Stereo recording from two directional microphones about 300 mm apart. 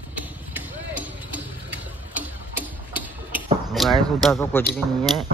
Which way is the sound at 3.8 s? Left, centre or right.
Centre.